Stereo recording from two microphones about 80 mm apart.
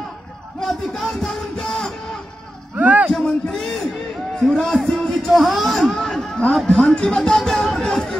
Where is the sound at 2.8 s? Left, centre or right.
Centre.